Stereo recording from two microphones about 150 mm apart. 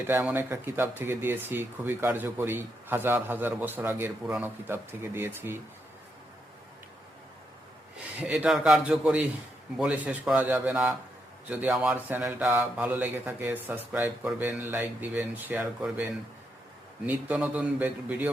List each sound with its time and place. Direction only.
0.1 s speech: 15° right (ahead or behind)
8.2 s a man's voice: 10° right (ahead or behind)